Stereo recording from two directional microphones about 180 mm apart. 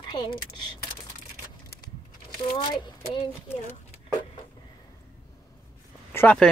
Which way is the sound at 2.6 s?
25° left (ahead or behind).